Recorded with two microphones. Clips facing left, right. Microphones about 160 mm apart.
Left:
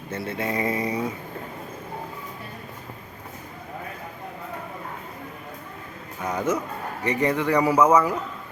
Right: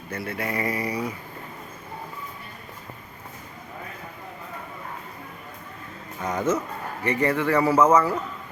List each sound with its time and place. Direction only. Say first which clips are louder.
0.1 s speech: left 2 dB; 25° left (ahead or behind)
6.2 s speech: right 1 dB; 10° left (ahead or behind)